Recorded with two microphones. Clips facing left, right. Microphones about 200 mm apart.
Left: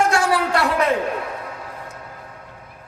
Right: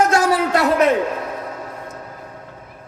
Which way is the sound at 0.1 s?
20° right (ahead or behind).